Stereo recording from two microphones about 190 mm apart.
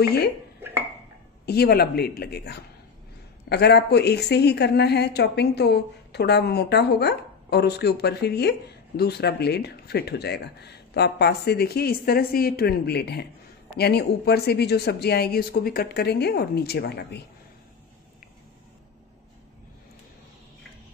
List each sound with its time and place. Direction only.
0.0 s speech: 55° left (ahead or behind)
0.6 s a sound: 10° right (ahead or behind)
1.4 s a woman's voice: 55° left (ahead or behind)